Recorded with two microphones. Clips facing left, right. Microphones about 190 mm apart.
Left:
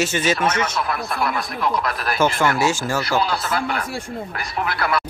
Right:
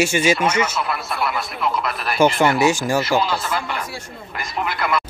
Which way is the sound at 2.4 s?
20° right (ahead or behind).